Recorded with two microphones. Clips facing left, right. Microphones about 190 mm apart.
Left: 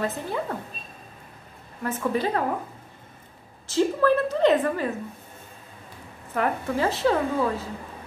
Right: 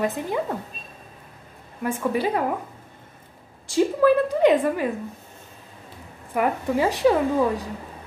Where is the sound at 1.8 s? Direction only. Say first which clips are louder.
Right 2 dB; 15° right (ahead or behind).